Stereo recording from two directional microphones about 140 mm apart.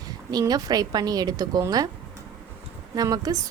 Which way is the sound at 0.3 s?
30° right (ahead or behind).